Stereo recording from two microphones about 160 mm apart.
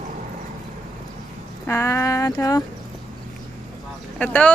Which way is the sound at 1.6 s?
15° left (ahead or behind).